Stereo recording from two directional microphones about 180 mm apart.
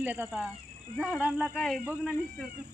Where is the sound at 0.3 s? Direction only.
Centre (ahead or behind).